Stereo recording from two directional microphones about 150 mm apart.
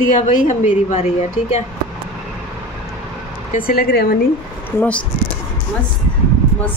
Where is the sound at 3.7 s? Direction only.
85° left.